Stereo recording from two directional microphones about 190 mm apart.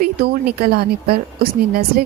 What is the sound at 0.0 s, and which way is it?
Speech, 55° right (ahead or behind).